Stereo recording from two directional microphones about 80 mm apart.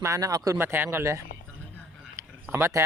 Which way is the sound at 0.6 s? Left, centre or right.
Right.